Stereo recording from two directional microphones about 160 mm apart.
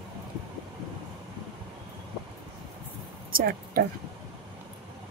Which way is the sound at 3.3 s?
60° right (ahead or behind).